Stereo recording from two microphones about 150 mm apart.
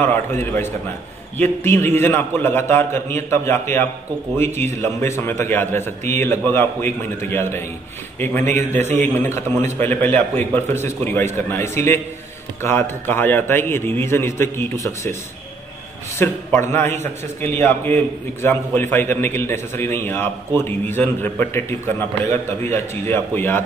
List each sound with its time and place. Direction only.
0.0 s a man's voice: 15° left (ahead or behind)
8.7 s a man's voice: 50° right (ahead or behind)
9.0 s a man's voice: 15° left (ahead or behind)
13.0 s a man's voice: 15° left (ahead or behind)
16.2 s a man's voice: 15° left (ahead or behind)
22.8 s a man's voice: 15° left (ahead or behind)